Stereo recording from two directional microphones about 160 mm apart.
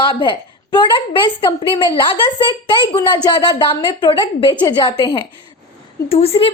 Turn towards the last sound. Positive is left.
turn(degrees=40)  # may be behind; listen again after turning